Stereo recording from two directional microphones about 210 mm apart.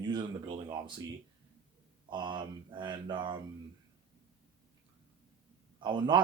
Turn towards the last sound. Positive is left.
turn(degrees=-20)  # may be behind; listen again after turning